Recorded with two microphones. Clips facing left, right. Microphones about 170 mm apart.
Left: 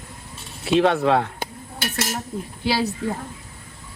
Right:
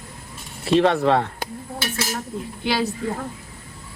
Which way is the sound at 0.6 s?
Centre (ahead or behind).